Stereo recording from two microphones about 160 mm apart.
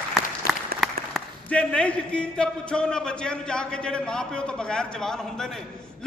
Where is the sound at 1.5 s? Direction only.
5° left (ahead or behind).